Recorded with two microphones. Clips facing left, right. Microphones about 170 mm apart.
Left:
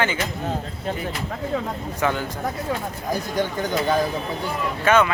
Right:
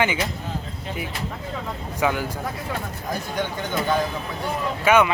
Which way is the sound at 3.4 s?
40° left (ahead or behind).